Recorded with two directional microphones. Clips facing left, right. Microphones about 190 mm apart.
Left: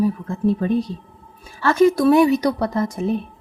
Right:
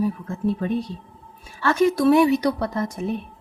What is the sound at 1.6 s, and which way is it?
A woman's voice, 40° left (ahead or behind).